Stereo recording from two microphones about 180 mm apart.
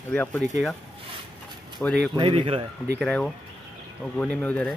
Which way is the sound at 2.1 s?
25° right (ahead or behind).